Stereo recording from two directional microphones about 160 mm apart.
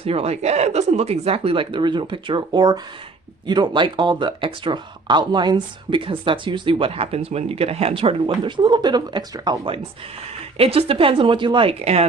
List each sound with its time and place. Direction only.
0.0 s speech: 40° right (ahead or behind)